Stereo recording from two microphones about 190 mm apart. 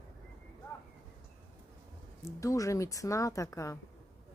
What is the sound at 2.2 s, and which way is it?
Speech, 15° left (ahead or behind).